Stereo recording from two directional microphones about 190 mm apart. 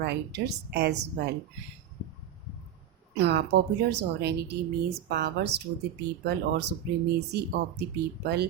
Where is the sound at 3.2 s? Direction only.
60° right (ahead or behind).